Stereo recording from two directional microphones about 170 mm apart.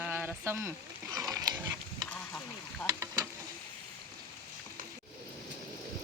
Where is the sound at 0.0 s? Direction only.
10° right (ahead or behind).